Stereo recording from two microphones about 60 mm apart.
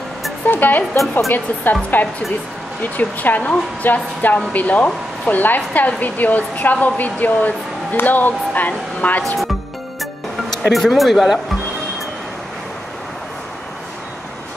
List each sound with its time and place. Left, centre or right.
0.5 s speech: left
10.6 s speech: centre